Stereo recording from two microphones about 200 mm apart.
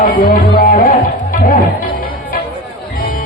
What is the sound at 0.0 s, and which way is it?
Speech, 45° left (ahead or behind).